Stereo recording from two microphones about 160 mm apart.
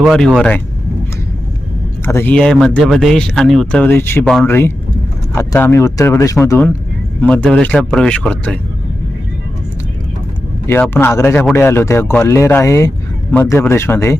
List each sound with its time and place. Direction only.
0.0 s speech: centre (ahead or behind)
2.0 s speech: 15° left (ahead or behind)
10.7 s speech: 15° left (ahead or behind)